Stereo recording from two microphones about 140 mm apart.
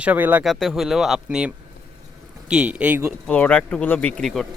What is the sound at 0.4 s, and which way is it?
Speech, centre (ahead or behind).